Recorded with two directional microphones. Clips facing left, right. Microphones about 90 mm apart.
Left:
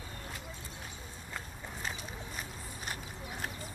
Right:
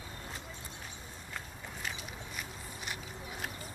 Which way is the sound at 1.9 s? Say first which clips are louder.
Left 1 dB; 40° left (ahead or behind).